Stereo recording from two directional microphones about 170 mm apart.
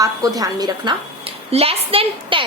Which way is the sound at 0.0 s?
20° right (ahead or behind).